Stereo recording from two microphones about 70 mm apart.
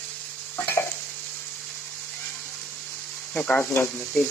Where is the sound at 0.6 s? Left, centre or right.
Left.